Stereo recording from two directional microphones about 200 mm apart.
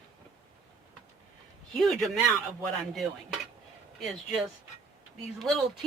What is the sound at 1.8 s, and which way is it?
Speech, centre (ahead or behind).